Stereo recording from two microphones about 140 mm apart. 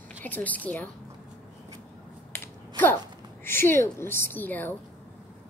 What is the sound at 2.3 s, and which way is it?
Finger snapping, 15° left (ahead or behind).